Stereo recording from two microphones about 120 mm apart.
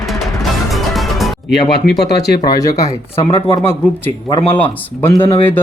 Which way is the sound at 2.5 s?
30° left (ahead or behind).